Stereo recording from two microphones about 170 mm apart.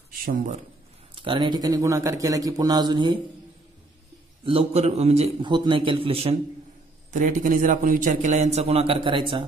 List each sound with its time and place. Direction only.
0.2 s a man's voice: 55° right (ahead or behind)
1.1 s a man's voice: 30° right (ahead or behind)
4.5 s a man's voice: 35° right (ahead or behind)
7.2 s a man's voice: 50° right (ahead or behind); by 9.4 s 30° right (ahead or behind)